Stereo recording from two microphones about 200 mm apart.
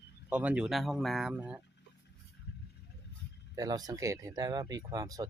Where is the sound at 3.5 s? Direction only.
20° right (ahead or behind).